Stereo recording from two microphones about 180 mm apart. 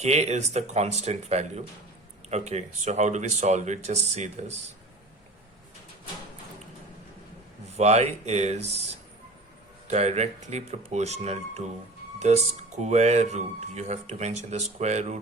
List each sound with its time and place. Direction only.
0.0 s speech: 35° right (ahead or behind)
7.7 s speech: 40° right (ahead or behind)